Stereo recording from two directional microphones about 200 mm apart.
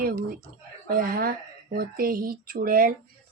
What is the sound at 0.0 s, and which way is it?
Speech, 45° right (ahead or behind).